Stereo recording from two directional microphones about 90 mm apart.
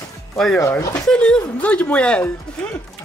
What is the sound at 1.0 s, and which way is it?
Speech, 10° left (ahead or behind).